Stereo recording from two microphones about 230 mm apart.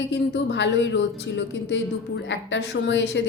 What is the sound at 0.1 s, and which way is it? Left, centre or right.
Speech, left.